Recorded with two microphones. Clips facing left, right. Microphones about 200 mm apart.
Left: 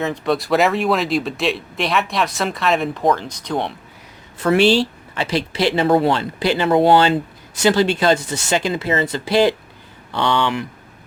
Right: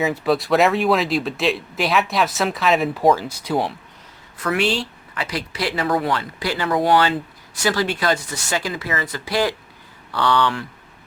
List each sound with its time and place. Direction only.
0.0 s speech: centre (ahead or behind)
4.4 s speech: 30° left (ahead or behind)